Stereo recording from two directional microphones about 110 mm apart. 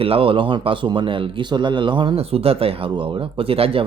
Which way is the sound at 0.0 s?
55° right (ahead or behind).